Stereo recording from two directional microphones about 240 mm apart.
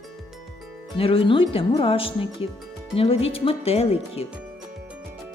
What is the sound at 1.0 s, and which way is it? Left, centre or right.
Speech, left.